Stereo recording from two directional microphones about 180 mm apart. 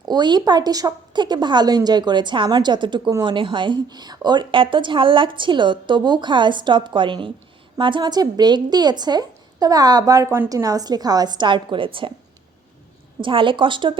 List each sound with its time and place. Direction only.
0.0 s speech: 25° right (ahead or behind)
13.2 s speech: 30° right (ahead or behind)